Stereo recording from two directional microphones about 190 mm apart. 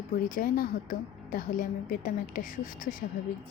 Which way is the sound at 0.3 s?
50° left (ahead or behind).